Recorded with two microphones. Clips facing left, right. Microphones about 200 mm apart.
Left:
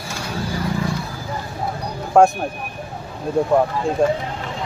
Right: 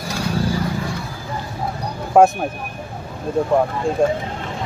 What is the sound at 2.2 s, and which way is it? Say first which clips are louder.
Speech: right 1 dB; 5° right (ahead or behind).